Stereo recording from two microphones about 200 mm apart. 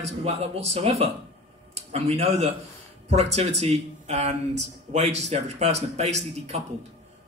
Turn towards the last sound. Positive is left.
turn(degrees=-35)  # may be behind; listen again after turning